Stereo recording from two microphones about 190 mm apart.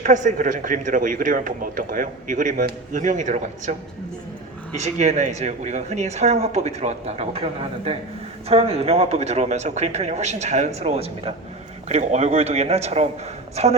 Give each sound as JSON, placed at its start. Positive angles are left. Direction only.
{"t": 0.0, "sound": "speech", "side_deg": -40}